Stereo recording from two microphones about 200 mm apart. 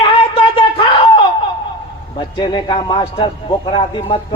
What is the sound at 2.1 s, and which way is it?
Speech, 20° left (ahead or behind).